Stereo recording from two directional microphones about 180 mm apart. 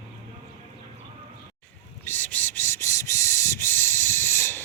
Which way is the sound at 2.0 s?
10° left (ahead or behind).